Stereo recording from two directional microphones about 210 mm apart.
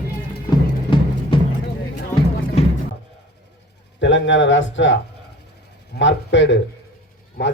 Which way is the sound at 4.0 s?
60° left (ahead or behind).